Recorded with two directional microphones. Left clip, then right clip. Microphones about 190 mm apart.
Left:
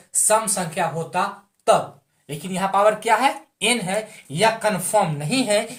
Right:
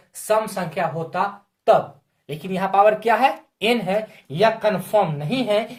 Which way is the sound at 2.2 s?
35° right (ahead or behind).